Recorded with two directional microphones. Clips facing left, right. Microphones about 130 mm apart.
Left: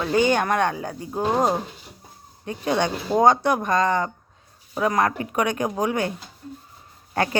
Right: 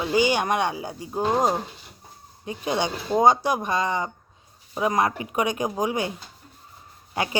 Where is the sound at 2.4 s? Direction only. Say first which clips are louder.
Left 3 dB; 15° right (ahead or behind).